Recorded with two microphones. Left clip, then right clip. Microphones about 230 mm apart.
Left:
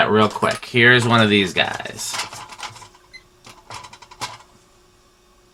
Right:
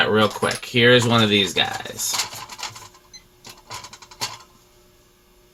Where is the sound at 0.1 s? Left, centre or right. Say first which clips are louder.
Left 2 dB; left.